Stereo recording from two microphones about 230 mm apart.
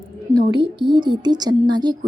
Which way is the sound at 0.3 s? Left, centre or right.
Right.